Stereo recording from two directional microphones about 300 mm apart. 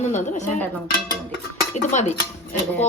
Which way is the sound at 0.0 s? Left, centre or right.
Left.